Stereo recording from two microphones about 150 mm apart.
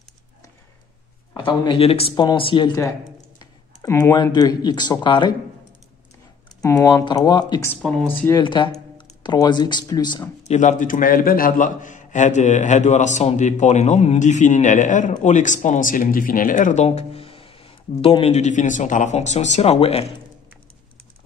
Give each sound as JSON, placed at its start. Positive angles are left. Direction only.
{"t": 1.3, "sound": "speech", "side_deg": 30}
{"t": 3.3, "sound": "speech", "side_deg": 25}
{"t": 6.6, "sound": "speech", "side_deg": 20}
{"t": 8.1, "sound": "speech", "side_deg": 15}
{"t": 8.4, "sound": "speech", "side_deg": 30}
{"t": 10.5, "sound": "a man's voice", "side_deg": 55}